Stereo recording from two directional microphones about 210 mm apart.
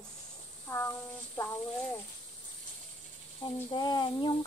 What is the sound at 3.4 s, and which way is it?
Speech, 20° left (ahead or behind).